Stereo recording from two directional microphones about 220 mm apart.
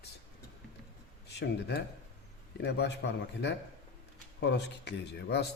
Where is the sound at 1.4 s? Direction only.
50° left (ahead or behind).